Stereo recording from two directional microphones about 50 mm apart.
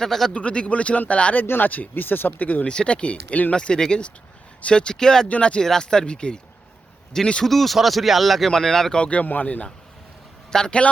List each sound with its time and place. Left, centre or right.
0.0 s speech: centre
0.3 s speech: left
1.4 s speech: left
2.6 s speech: left
5.6 s speech: centre
7.4 s speech: centre
9.0 s speech: left
10.5 s speech: centre